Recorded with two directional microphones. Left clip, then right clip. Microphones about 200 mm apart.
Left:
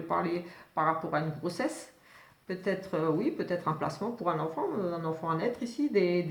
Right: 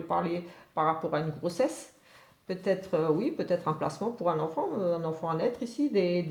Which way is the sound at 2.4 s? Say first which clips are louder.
Right 3 dB; 35° right (ahead or behind).